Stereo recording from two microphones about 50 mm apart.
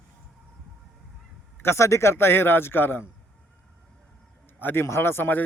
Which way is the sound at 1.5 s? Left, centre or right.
Left.